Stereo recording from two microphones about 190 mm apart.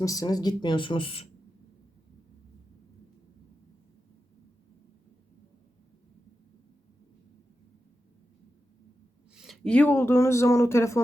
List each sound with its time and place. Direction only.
0.0 s speech: 20° left (ahead or behind)
9.3 s speech: centre (ahead or behind); by 11.0 s 15° left (ahead or behind)